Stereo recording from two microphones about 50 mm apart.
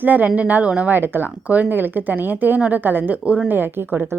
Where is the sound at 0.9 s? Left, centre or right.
Right.